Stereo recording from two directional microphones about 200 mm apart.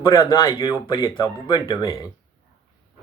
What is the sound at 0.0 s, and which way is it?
Speech, 15° left (ahead or behind).